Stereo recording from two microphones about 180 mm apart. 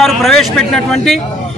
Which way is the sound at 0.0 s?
Centre (ahead or behind).